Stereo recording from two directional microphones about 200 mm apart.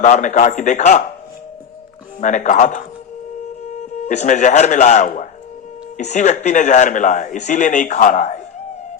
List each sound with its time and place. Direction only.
0.0 s a man's voice: 35° left (ahead or behind)
2.2 s a man's voice: 40° left (ahead or behind)